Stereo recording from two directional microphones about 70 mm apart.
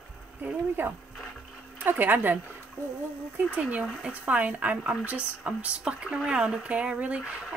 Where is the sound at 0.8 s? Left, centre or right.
Right.